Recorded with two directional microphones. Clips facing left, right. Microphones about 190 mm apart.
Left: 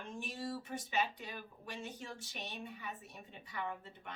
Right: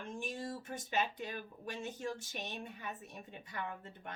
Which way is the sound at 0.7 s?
45° right (ahead or behind).